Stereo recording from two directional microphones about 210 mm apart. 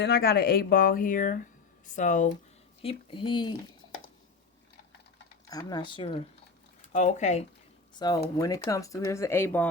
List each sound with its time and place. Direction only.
0.0 s speech: 50° left (ahead or behind)
2.8 s speech: 25° left (ahead or behind)
5.5 s speech: 20° left (ahead or behind)
6.9 s speech: 35° left (ahead or behind)
7.9 s speech: 20° left (ahead or behind)